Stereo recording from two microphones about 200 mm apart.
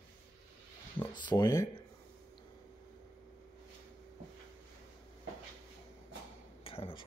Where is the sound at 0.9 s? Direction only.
20° left (ahead or behind).